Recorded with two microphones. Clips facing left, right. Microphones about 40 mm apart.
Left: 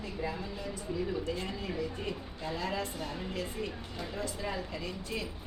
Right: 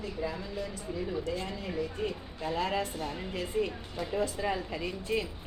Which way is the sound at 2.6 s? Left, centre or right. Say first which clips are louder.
Right 4 dB; right.